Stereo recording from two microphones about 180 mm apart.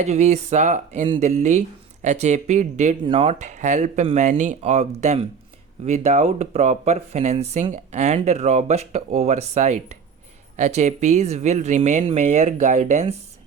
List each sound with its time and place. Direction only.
0.0 s speech: 40° right (ahead or behind)